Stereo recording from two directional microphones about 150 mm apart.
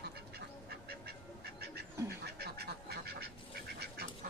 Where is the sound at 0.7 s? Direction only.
90° right.